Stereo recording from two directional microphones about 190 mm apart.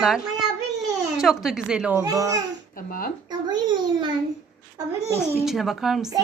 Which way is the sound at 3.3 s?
20° right (ahead or behind).